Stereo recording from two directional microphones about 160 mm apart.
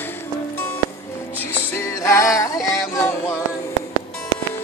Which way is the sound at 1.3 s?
15° left (ahead or behind).